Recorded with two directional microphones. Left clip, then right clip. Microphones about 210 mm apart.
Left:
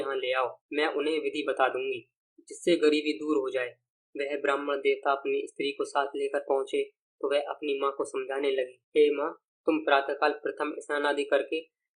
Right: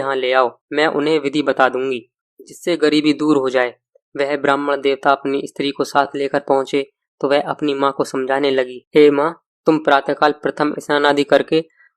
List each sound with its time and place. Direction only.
0.0 s speech: 45° right (ahead or behind)